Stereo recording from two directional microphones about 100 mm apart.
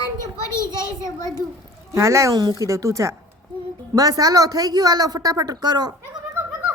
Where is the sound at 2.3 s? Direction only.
40° right (ahead or behind).